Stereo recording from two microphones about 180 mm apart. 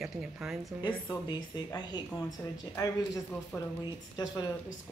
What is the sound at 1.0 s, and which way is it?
Speech, 25° left (ahead or behind).